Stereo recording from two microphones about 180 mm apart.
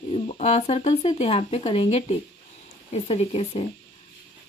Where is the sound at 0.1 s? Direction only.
35° left (ahead or behind).